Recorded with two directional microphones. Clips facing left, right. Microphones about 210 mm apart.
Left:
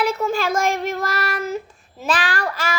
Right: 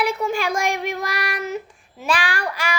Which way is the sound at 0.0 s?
15° right (ahead or behind).